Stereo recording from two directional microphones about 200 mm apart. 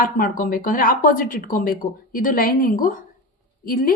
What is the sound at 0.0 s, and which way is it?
Speech, 45° left (ahead or behind).